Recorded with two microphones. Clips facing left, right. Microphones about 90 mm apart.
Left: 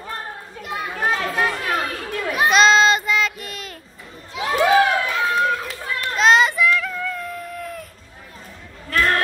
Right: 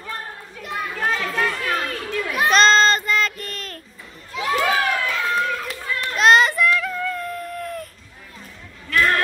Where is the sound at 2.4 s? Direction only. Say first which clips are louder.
Left 1 dB; 5° left (ahead or behind).